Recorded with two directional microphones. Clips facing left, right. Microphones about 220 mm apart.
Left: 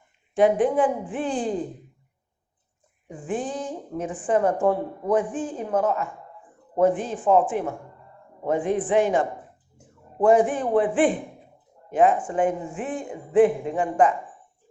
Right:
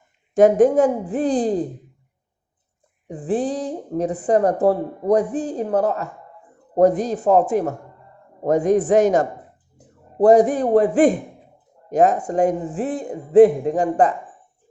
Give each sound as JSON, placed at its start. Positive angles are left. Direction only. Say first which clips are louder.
{"t": 0.3, "sound": "a woman's voice", "louder": "right 6 dB", "side_deg": -45}
{"t": 3.1, "sound": "a woman's voice", "louder": "right 6 dB", "side_deg": -35}